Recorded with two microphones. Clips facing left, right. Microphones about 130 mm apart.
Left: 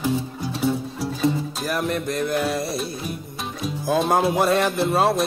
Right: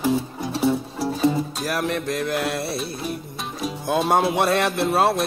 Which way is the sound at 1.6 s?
Centre (ahead or behind).